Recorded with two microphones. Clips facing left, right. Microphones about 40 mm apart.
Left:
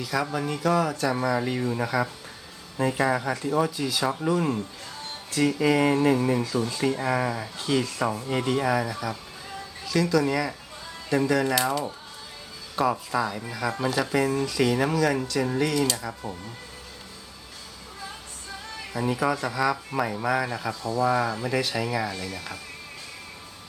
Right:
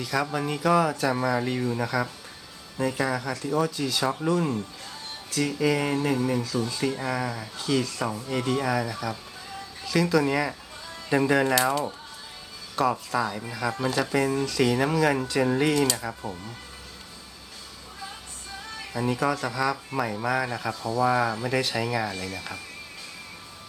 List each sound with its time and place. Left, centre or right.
0.0 s speech: centre
11.1 s speech: right
11.5 s speech: centre
15.0 s speech: centre
18.9 s speech: centre